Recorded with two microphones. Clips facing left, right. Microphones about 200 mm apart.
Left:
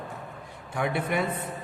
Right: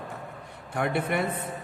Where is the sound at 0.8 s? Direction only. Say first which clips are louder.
Right 1 dB; 55° right (ahead or behind).